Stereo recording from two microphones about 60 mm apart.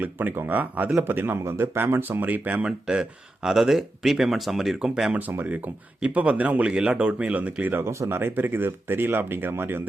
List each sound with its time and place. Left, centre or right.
0.0 s speech: right
2.6 s speech: centre
5.1 s speech: right
7.9 s speech: right
8.2 s speech: right